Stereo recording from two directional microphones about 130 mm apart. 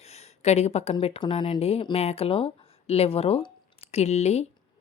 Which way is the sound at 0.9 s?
50° left (ahead or behind).